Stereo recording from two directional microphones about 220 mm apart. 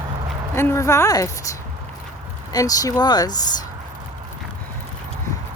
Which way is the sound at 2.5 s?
15° left (ahead or behind).